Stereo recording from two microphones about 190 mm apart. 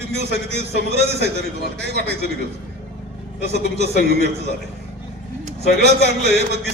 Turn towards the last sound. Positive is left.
turn(degrees=-60)  # may be behind; listen again after turning